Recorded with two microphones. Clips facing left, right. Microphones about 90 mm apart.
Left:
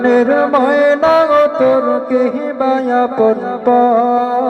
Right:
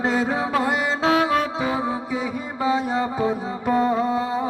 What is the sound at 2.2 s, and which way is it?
Mantra, 5° right (ahead or behind).